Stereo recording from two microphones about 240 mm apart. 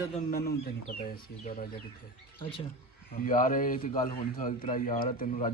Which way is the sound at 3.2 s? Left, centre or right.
Left.